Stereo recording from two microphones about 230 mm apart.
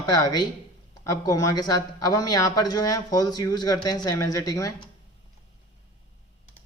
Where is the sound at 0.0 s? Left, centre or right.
Centre.